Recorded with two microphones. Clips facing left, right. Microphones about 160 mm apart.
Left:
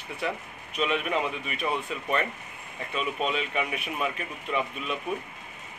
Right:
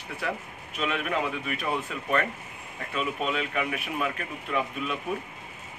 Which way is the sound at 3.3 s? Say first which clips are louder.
Even; 20° left (ahead or behind).